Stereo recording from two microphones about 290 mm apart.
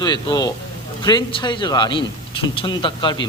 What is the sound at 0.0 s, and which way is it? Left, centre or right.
Speech, centre.